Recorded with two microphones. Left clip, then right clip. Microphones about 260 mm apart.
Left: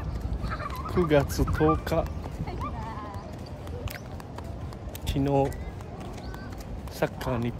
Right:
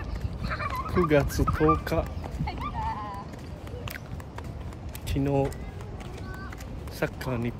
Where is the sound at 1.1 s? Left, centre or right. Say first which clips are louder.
Left 1 dB; centre.